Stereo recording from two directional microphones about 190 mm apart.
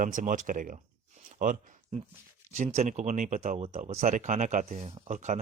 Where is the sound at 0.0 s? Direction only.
45° right (ahead or behind).